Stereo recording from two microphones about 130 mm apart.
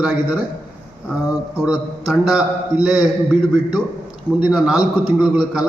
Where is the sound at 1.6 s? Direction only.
5° right (ahead or behind).